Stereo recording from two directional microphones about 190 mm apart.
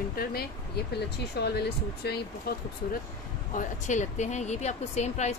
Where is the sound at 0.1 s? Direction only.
55° left (ahead or behind).